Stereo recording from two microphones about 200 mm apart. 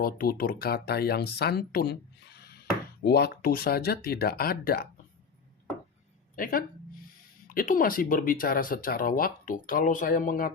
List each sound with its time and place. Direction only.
0.0 s speech: 45° left (ahead or behind)
6.3 s a sound: 45° left (ahead or behind)
7.5 s speech: 45° left (ahead or behind)